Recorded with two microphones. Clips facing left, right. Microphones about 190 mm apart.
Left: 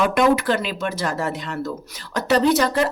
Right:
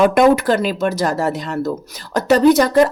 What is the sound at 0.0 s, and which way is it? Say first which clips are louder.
A woman's voice: right 5 dB; 45° right (ahead or behind).